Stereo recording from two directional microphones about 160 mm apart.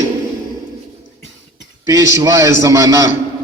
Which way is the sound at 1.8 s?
20° right (ahead or behind).